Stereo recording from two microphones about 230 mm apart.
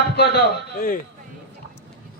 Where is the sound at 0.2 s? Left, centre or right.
Left.